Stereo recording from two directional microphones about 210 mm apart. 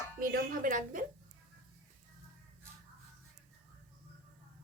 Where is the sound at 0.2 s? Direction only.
40° right (ahead or behind).